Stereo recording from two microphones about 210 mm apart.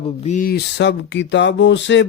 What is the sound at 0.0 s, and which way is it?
Speech, 30° left (ahead or behind).